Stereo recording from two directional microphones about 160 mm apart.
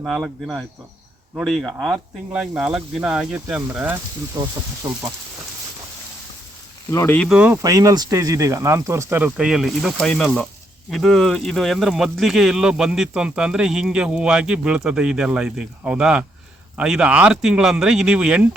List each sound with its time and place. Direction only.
0.0 s speech: 5° right (ahead or behind)
4.4 s speech: 20° right (ahead or behind)
6.9 s speech: 15° left (ahead or behind)
7.2 s speech: 5° right (ahead or behind)
7.6 s speech: 20° right (ahead or behind)